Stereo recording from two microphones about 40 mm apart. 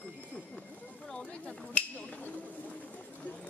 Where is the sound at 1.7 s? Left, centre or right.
Left.